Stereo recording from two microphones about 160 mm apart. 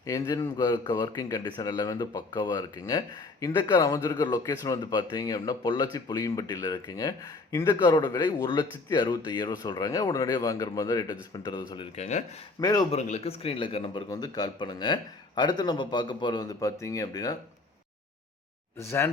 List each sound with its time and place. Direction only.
0.0 s speech: 20° left (ahead or behind)
11.9 s speech: 45° left (ahead or behind)
12.5 s speech: 25° left (ahead or behind)
12.9 s a man's voice: 45° left (ahead or behind); by 17.3 s 20° left (ahead or behind)
18.8 s speech: 15° left (ahead or behind)